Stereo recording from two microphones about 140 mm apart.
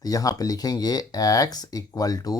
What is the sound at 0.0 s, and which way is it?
Speech, 25° left (ahead or behind).